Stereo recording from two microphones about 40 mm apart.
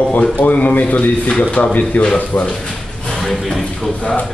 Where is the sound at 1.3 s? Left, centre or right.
Left.